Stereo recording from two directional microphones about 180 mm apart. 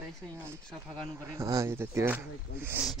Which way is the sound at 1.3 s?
15° right (ahead or behind).